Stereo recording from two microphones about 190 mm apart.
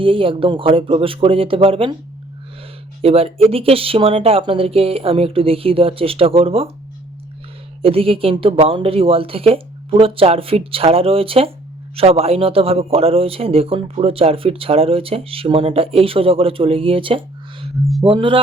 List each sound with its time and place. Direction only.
0.0 s speech: 25° right (ahead or behind)
3.0 s speech: 30° right (ahead or behind)
7.8 s speech: 30° right (ahead or behind)